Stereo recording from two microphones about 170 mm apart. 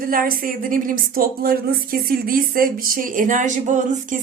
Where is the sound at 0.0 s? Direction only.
55° right (ahead or behind).